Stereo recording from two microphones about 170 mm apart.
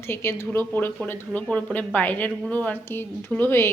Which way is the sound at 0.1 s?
15° left (ahead or behind).